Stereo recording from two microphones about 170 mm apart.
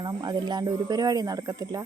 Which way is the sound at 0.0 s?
25° right (ahead or behind).